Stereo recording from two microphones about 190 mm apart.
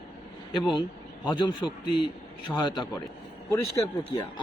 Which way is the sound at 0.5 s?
25° left (ahead or behind).